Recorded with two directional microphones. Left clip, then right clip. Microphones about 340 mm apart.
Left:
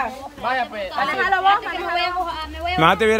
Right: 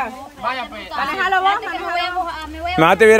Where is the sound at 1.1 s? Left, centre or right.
Right.